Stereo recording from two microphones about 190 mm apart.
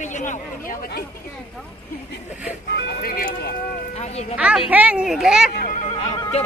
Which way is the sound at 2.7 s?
55° left (ahead or behind).